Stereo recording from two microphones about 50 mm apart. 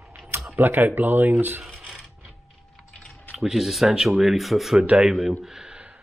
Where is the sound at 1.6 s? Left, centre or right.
Centre.